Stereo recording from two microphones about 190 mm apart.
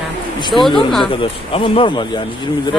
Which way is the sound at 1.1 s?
25° left (ahead or behind).